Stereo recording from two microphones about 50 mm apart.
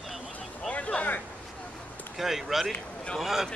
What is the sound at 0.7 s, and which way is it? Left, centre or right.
Speech, left.